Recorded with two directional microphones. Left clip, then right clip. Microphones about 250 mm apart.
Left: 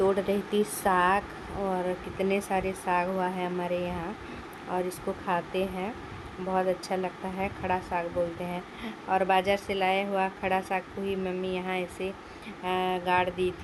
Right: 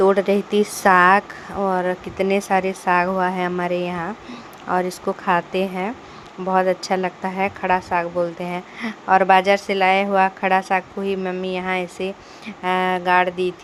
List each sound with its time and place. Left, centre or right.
0.0 s a woman's voice: centre